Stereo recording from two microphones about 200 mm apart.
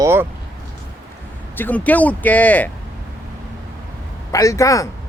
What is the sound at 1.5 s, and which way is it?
Speech, 10° left (ahead or behind).